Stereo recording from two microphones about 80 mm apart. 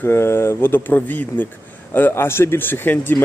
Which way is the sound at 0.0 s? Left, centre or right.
Left.